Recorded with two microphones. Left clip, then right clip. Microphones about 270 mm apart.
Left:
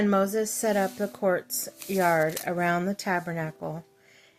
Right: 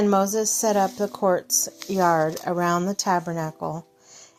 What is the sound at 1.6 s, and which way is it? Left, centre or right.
Speech, right.